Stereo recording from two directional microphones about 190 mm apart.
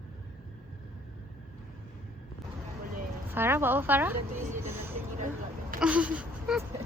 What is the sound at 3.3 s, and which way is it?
Speech, 10° right (ahead or behind).